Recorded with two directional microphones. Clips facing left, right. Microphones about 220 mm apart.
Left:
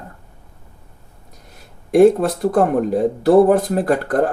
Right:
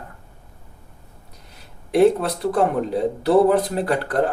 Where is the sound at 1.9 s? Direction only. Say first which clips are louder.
Left 4 dB; 45° left (ahead or behind).